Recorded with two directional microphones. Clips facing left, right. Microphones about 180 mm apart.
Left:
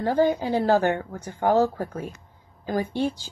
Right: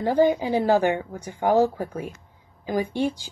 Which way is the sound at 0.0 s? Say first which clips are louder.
Right 2 dB; 15° right (ahead or behind).